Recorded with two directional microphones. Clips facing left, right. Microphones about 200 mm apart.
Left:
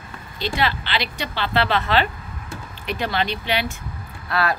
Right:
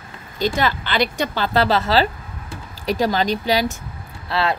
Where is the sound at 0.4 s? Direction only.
45° right (ahead or behind).